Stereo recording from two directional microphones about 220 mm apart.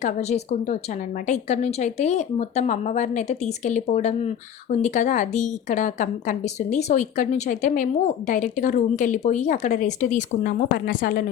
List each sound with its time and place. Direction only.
0.0 s a woman's voice: 30° left (ahead or behind)